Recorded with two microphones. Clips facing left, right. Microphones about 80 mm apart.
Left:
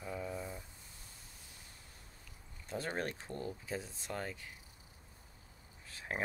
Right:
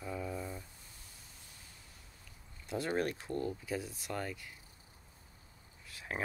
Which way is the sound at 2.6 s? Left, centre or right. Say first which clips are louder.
Right 4 dB; left.